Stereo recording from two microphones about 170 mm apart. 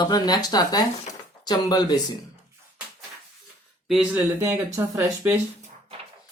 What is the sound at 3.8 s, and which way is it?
Speech, centre (ahead or behind).